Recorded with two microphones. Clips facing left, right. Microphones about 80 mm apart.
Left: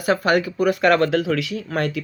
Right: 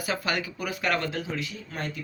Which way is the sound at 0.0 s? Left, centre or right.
Left.